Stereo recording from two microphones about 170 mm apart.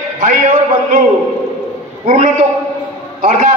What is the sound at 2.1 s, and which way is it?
A man's voice, 40° right (ahead or behind).